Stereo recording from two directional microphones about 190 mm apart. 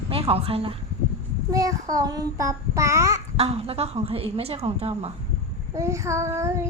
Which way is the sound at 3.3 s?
30° right (ahead or behind).